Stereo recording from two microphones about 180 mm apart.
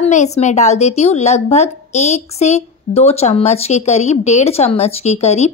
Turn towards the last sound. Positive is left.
turn(degrees=35)  # may be behind; listen again after turning